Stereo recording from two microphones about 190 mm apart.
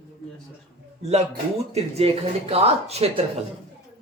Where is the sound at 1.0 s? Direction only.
35° right (ahead or behind).